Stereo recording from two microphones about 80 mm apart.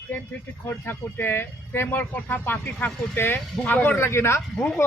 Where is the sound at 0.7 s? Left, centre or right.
Left.